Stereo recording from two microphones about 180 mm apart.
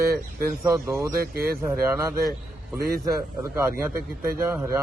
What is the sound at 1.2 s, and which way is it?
Speech, 55° right (ahead or behind).